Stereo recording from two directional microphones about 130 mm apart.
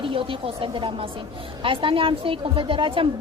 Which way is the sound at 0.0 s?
45° right (ahead or behind).